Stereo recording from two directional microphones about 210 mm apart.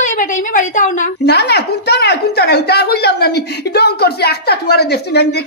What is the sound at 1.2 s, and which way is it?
Speech, 50° left (ahead or behind).